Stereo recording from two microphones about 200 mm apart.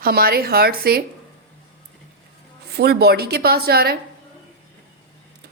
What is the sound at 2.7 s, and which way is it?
A woman's voice, 55° right (ahead or behind).